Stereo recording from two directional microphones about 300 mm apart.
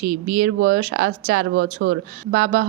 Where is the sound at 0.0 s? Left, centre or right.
Right.